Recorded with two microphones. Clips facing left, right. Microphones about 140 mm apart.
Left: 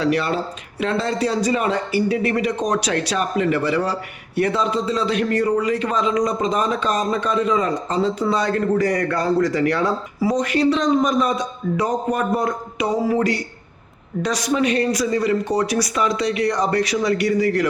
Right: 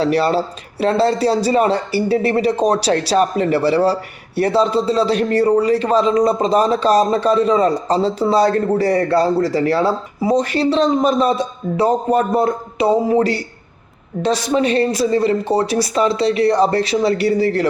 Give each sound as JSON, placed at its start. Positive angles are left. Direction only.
{"t": 0.0, "sound": "a man's voice", "side_deg": -35}